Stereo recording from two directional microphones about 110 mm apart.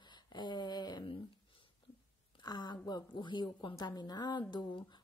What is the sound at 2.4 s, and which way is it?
Speech, 40° left (ahead or behind).